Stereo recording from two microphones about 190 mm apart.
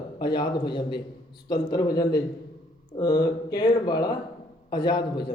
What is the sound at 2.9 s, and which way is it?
A man's voice, 20° left (ahead or behind).